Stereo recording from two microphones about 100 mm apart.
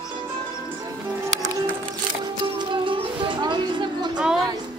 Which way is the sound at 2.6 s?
55° right (ahead or behind).